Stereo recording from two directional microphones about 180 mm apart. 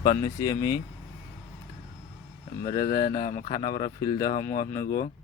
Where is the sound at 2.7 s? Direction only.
20° left (ahead or behind).